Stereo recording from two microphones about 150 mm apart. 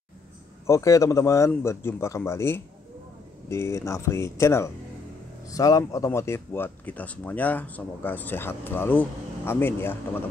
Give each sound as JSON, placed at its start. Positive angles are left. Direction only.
{"t": 0.7, "sound": "speech", "side_deg": 20}